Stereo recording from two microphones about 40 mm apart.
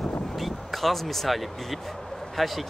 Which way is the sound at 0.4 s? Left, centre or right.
Centre.